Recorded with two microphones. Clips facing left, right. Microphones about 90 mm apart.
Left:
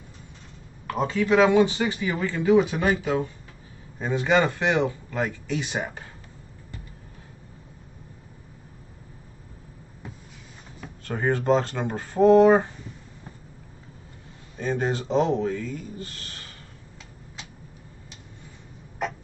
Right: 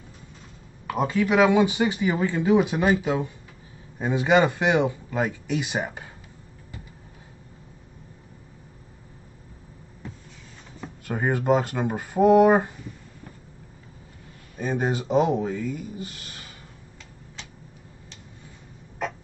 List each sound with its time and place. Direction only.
0.8 s speech: 10° right (ahead or behind)
10.8 s speech: 10° right (ahead or behind)
14.6 s speech: 15° right (ahead or behind)